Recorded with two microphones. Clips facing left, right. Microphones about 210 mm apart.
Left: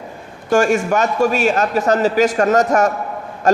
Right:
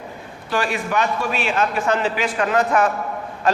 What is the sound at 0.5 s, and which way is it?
A man's voice, 45° left (ahead or behind).